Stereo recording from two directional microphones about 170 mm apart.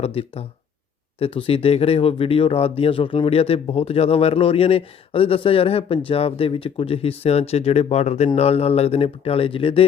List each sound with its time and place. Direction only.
0.0 s speech: 35° left (ahead or behind)